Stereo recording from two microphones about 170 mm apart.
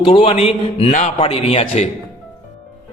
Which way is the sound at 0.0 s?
30° left (ahead or behind).